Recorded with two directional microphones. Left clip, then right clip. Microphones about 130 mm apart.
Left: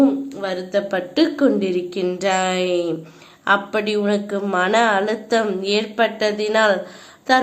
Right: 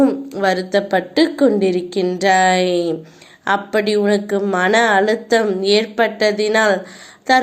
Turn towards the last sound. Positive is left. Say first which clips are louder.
# right 2 dB
turn(degrees=-20)  # may be behind; listen again after turning